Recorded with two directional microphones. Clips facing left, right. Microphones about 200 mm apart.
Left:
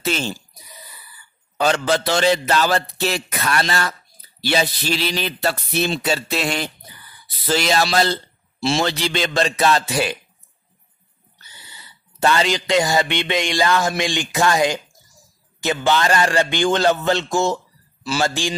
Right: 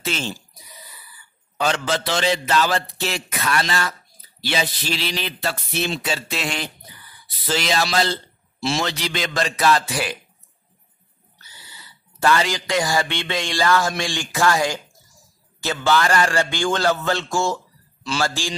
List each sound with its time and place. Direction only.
0.0 s speech: 40° left (ahead or behind)
1.6 s a man's voice: 40° left (ahead or behind)
12.2 s a man's voice: 25° left (ahead or behind)